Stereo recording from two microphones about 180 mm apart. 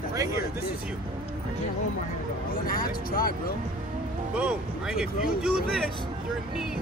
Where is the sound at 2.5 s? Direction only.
50° left (ahead or behind).